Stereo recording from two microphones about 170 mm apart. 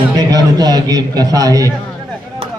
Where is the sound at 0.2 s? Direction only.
20° right (ahead or behind).